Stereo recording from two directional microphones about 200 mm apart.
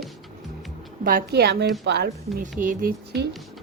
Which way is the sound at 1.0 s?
45° right (ahead or behind).